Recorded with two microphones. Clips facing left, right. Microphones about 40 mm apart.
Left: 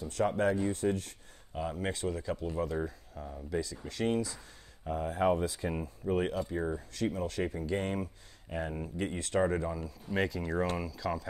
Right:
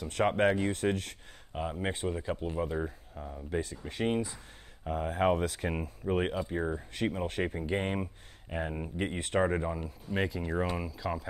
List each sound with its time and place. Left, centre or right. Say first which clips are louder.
0.1 s speech: right 3 dB; right
1.5 s speech: right 1 dB; right; by 3.4 s centre
3.4 s speech: right 1 dB; right
5.1 s speech: right 1 dB; right; by 6.8 s centre
7.1 s speech: right 1 dB; right
8.5 s speech: right 1 dB; centre
10.1 s speech: even; centre